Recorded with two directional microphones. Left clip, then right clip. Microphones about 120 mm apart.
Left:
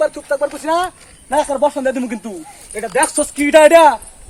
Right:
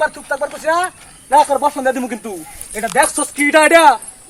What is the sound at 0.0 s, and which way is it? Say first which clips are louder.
Speech: left 2 dB; 65° left (ahead or behind).